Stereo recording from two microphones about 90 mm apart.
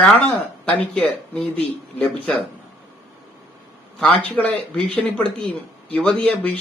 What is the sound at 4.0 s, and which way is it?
Speech, 15° left (ahead or behind).